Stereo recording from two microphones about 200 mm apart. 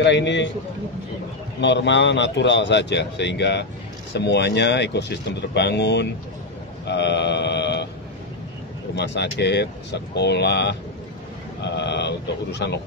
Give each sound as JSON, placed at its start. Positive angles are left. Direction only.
{"t": 0.0, "sound": "speech", "side_deg": 60}
{"t": 1.6, "sound": "speech", "side_deg": 60}
{"t": 6.9, "sound": "mantra", "side_deg": 60}
{"t": 8.9, "sound": "speech", "side_deg": 60}